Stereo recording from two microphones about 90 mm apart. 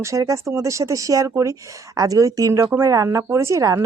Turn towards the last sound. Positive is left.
turn(degrees=-35)  # may be behind; listen again after turning